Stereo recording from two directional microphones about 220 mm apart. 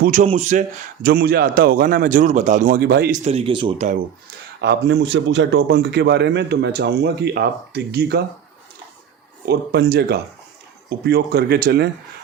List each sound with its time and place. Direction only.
0.0 s a man's voice: 35° right (ahead or behind)
1.0 s a man's voice: 45° right (ahead or behind)
3.2 s speech: 25° right (ahead or behind)
4.6 s a man's voice: 50° right (ahead or behind)
9.5 s a man's voice: 50° right (ahead or behind)